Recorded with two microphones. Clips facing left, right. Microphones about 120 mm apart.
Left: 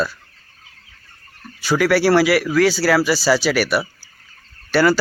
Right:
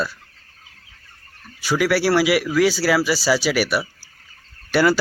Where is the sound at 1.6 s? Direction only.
5° right (ahead or behind).